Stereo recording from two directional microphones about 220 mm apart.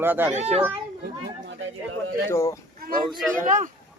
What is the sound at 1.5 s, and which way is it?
Speech, 55° right (ahead or behind).